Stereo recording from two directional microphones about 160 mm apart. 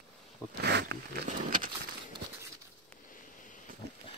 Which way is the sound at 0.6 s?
90° right.